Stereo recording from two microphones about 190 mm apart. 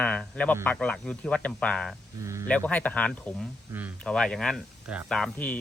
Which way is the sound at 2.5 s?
5° left (ahead or behind).